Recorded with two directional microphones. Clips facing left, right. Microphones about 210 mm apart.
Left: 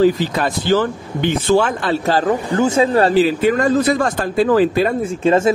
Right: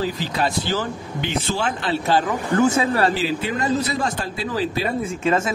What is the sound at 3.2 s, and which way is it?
Speech, 50° left (ahead or behind).